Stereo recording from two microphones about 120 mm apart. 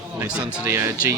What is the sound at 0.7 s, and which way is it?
Speech, 15° right (ahead or behind).